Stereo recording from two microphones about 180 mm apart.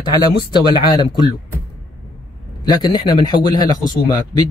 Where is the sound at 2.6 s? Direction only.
20° left (ahead or behind).